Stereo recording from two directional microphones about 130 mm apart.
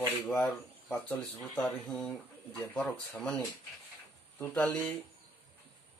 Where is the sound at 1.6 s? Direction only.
5° left (ahead or behind).